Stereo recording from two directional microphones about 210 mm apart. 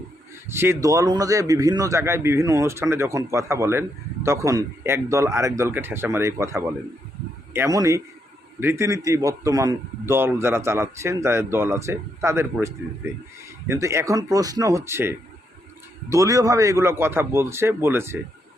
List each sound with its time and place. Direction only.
0.4 s a man's voice: 10° right (ahead or behind)